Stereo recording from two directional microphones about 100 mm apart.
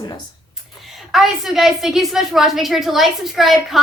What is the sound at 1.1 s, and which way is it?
A woman's voice, 5° right (ahead or behind).